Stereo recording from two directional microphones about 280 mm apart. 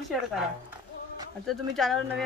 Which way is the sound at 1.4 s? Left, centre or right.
Centre.